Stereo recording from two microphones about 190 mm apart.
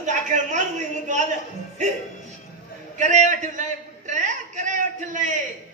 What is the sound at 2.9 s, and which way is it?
Speech, 40° right (ahead or behind).